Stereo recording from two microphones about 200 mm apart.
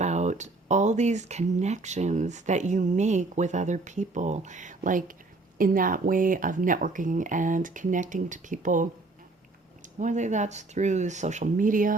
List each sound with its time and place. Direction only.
0.0 s speech: 35° right (ahead or behind)
10.0 s speech: 35° right (ahead or behind)